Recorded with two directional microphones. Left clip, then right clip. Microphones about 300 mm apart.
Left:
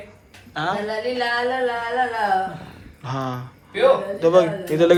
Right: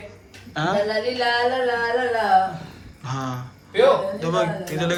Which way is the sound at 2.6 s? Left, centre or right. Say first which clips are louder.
Left 1 dB; centre.